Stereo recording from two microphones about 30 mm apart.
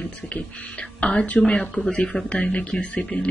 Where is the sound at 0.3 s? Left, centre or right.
Left.